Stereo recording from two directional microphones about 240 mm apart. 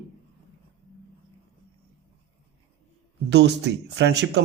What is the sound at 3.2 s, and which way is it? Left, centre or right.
Speech, right.